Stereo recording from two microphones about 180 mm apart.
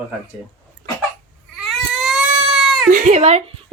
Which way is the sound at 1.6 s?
Centre (ahead or behind).